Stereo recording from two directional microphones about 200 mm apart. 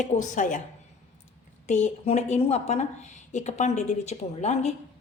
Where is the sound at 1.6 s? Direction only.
35° left (ahead or behind).